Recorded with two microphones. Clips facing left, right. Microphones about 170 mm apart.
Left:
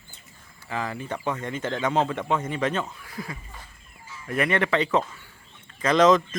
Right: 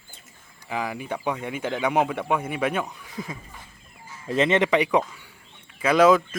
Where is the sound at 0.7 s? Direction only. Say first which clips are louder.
Right 1 dB; 10° right (ahead or behind).